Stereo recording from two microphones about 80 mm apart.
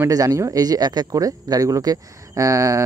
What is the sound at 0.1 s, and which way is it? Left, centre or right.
Speech, right.